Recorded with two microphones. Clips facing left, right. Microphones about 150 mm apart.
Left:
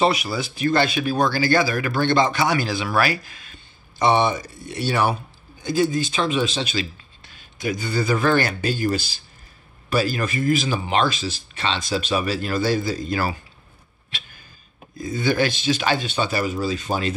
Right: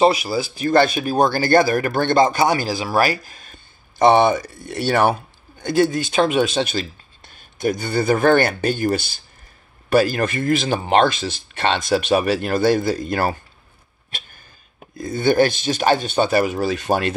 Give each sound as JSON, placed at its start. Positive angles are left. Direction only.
{"t": 0.0, "sound": "speech", "side_deg": -30}
{"t": 0.7, "sound": "speech", "side_deg": -45}
{"t": 15.0, "sound": "speech", "side_deg": -55}